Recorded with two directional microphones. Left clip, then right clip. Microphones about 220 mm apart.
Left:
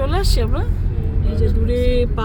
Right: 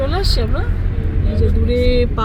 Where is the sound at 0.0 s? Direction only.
10° left (ahead or behind).